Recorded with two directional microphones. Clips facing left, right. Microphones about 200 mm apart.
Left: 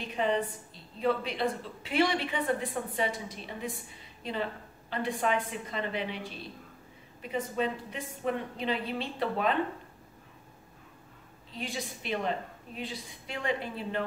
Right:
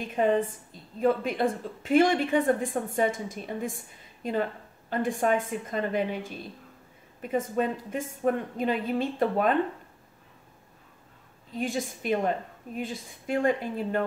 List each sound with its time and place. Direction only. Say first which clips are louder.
0.0 s a woman's voice: right 5 dB; 50° right (ahead or behind)
11.5 s a woman's voice: right 7 dB; 50° right (ahead or behind)